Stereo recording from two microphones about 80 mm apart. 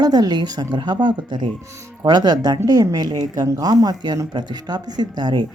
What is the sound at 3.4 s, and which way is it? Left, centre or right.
Speech, right.